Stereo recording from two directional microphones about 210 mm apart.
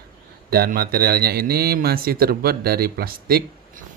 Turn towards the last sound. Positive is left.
turn(degrees=-45)  # may be behind; listen again after turning